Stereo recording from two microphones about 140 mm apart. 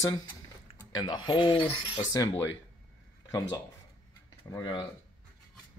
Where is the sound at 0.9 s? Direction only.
30° left (ahead or behind).